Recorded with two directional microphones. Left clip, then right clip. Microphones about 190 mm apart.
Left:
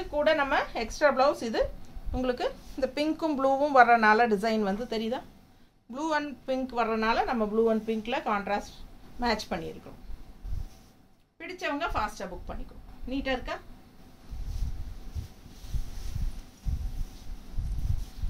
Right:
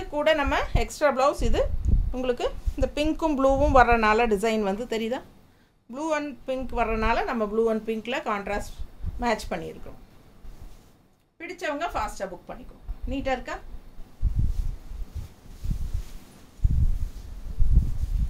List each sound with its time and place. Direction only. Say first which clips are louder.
0.1 s a woman's voice: right 2 dB; 25° right (ahead or behind)
5.9 s speech: right 2 dB; 20° right (ahead or behind)
11.3 s a woman's voice: right 2 dB; 20° right (ahead or behind)